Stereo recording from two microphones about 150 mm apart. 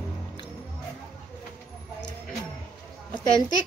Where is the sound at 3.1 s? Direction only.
30° left (ahead or behind).